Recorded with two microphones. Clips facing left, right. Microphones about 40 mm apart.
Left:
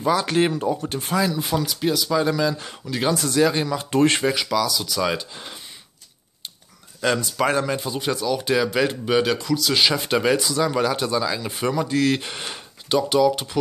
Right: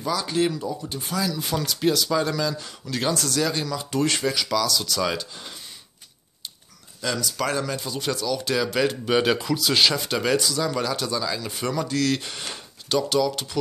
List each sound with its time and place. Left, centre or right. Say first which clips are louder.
0.0 s speech: left 6 dB; left
0.6 s speech: left 6 dB; left
1.1 s speech: left 5 dB; left
1.4 s speech: left 1 dB; centre; by 4.3 s left
4.5 s speech: left 1 dB; centre
7.0 s speech: left 5 dB; left; by 9.2 s centre
9.2 s speech: left 1 dB; centre
9.9 s speech: left 3 dB; centre